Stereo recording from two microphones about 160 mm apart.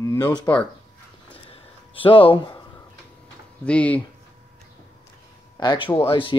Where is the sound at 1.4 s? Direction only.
35° left (ahead or behind).